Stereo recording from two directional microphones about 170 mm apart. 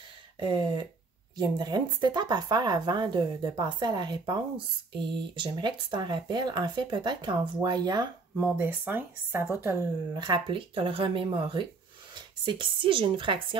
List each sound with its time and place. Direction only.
0.4 s speech: 30° right (ahead or behind)
8.4 s speech: 10° right (ahead or behind)
10.1 s speech: 25° right (ahead or behind)